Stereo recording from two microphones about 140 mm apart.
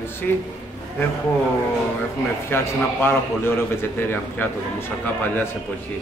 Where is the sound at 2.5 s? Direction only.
15° left (ahead or behind).